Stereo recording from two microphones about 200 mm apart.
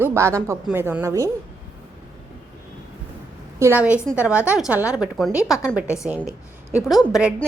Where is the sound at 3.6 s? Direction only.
10° right (ahead or behind).